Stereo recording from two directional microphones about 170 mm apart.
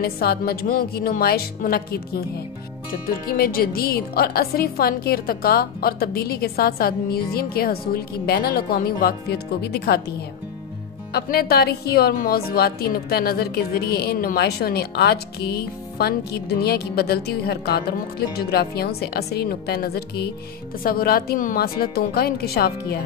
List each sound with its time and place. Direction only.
0.0 s a woman's voice: 65° left (ahead or behind)
11.1 s a woman's voice: 65° left (ahead or behind)